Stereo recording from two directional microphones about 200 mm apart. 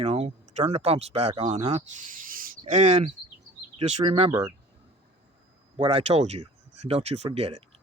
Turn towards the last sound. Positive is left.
turn(degrees=-30)  # may be behind; listen again after turning